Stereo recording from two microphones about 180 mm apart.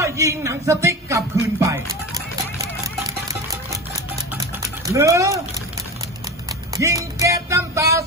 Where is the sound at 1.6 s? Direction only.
15° right (ahead or behind).